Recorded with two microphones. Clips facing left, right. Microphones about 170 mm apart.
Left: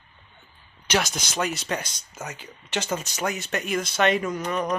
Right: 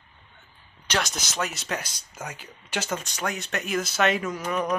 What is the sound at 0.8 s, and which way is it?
Speech, 5° left (ahead or behind).